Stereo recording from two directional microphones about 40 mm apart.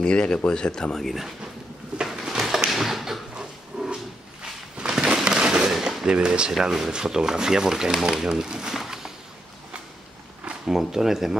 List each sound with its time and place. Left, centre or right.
0.0 s speech: left
2.0 s a sound: centre
6.0 s speech: right
6.6 s speech: centre
6.9 s speech: centre
8.7 s a sound: centre
10.7 s speech: centre